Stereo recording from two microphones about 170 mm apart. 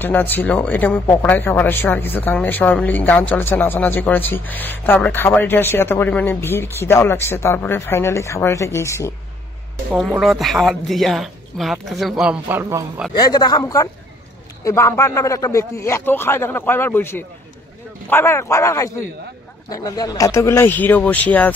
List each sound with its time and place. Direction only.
0.0 s speech: 10° left (ahead or behind)
10.1 s speech: centre (ahead or behind)
13.1 s speech: 25° left (ahead or behind)